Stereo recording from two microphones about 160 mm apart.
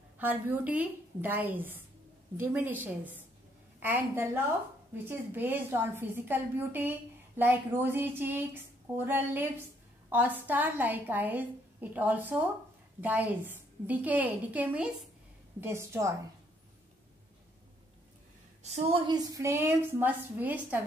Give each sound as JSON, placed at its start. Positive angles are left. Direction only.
{"t": 0.2, "sound": "a woman's voice", "side_deg": -10}
{"t": 18.6, "sound": "a woman's voice", "side_deg": -40}